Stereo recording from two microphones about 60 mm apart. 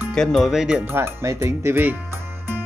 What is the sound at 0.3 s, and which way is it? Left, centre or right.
Speech, centre.